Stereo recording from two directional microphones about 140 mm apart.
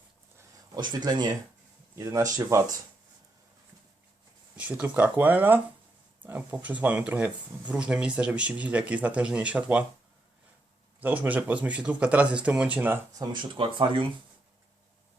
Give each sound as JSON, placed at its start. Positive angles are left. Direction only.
{"t": 0.7, "sound": "speech", "side_deg": -30}
{"t": 4.5, "sound": "speech", "side_deg": -10}
{"t": 11.0, "sound": "speech", "side_deg": -10}
{"t": 13.1, "sound": "speech", "side_deg": -35}